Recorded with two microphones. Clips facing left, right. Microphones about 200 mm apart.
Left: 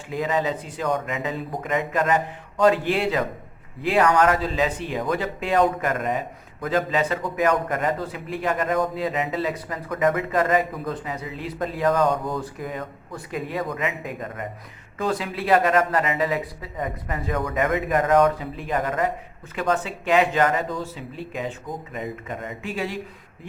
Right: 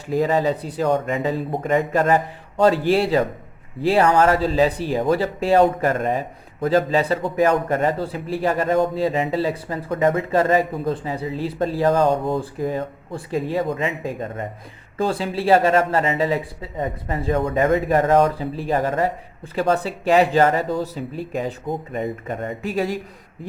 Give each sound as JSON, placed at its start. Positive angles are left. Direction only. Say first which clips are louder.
{"t": 0.1, "sound": "speech", "louder": "right 5 dB", "side_deg": -35}
{"t": 22.3, "sound": "speech", "louder": "right 5 dB", "side_deg": -45}